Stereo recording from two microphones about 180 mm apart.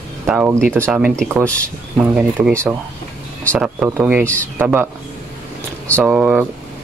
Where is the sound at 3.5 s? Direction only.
10° right (ahead or behind).